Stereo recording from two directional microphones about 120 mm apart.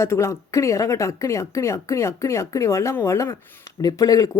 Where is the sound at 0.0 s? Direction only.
25° left (ahead or behind).